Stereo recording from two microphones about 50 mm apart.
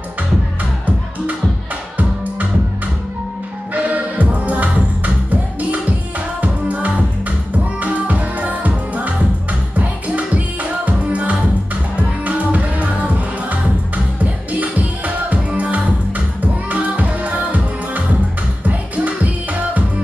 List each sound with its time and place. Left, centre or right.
3.7 s music: right
14.6 s music: right